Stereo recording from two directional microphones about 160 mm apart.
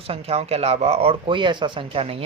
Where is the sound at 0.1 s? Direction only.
40° right (ahead or behind).